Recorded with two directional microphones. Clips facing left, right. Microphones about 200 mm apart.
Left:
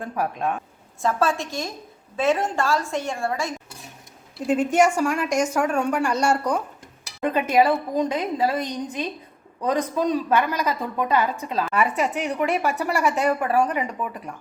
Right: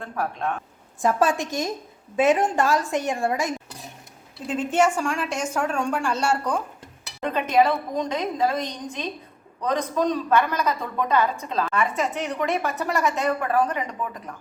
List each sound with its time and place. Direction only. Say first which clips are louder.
0.0 s a woman's voice: left 2 dB; 15° left (ahead or behind)
1.0 s a woman's voice: right 1 dB; 15° right (ahead or behind)
4.4 s a woman's voice: left 3 dB; 10° left (ahead or behind)
7.2 s a woman's voice: left 1 dB; 10° left (ahead or behind)